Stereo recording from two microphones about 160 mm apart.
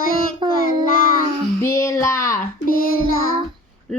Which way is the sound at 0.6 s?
60° left (ahead or behind).